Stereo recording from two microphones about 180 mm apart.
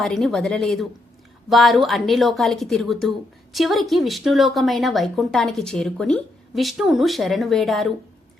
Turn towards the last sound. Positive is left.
turn(degrees=0)  # may be behind; listen again after turning